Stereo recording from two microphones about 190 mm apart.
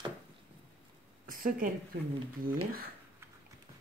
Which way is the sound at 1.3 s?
45° right (ahead or behind).